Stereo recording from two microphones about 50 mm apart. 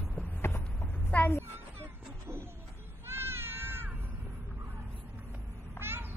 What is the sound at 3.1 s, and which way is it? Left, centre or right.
Meow, right.